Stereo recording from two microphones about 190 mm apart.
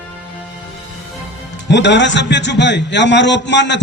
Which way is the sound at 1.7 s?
70° left (ahead or behind).